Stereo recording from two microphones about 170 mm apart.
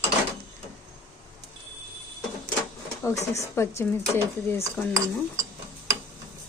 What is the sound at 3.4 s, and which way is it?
Speech, 15° left (ahead or behind).